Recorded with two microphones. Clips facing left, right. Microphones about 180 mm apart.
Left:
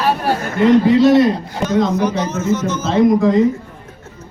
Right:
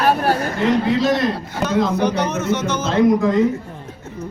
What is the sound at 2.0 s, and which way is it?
Speech, 65° right (ahead or behind).